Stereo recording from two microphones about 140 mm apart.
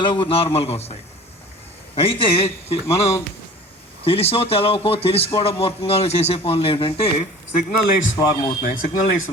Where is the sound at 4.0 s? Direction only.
45° left (ahead or behind).